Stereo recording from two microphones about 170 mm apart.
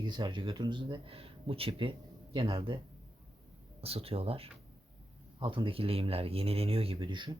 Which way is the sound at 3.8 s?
35° right (ahead or behind).